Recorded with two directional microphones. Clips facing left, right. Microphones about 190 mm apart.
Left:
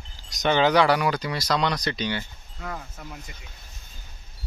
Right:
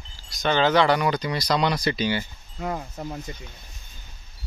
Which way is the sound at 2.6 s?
25° right (ahead or behind).